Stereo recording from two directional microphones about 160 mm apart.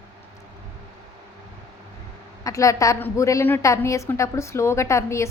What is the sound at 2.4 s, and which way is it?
A woman's voice, 20° left (ahead or behind).